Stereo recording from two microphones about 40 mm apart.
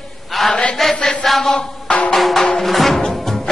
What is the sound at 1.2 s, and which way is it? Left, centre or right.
Chant, centre.